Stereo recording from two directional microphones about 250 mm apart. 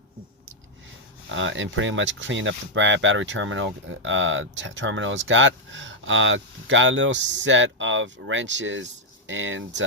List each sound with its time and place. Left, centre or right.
1.3 s speech: right